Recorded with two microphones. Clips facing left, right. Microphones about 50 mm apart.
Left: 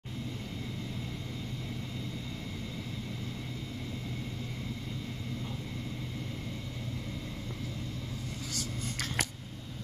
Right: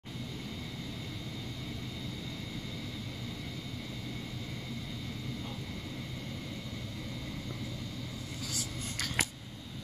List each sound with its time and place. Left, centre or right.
8.5 s whispering: left